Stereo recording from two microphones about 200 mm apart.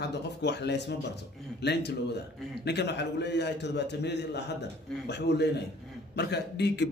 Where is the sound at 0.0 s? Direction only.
60° left (ahead or behind).